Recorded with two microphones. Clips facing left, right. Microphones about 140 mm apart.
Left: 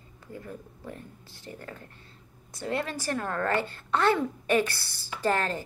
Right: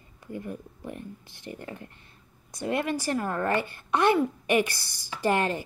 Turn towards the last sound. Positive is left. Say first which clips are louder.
# right 2 dB
turn(degrees=-15)  # may be behind; listen again after turning